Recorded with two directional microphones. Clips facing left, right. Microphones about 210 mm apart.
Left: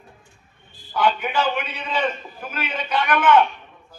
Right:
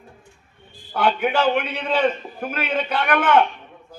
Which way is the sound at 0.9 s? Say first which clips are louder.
Right 2 dB; 55° right (ahead or behind).